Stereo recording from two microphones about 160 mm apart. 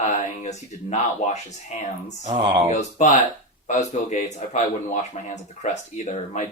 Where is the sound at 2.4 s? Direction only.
30° right (ahead or behind).